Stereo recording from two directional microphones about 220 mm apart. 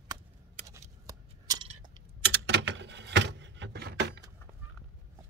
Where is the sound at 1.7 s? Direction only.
20° right (ahead or behind).